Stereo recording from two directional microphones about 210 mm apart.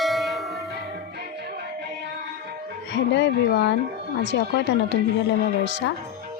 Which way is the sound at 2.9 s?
55° left (ahead or behind).